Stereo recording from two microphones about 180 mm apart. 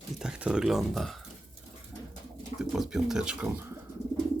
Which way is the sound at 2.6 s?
Centre (ahead or behind).